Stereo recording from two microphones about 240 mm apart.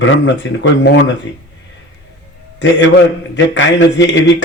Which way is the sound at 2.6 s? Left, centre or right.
Left.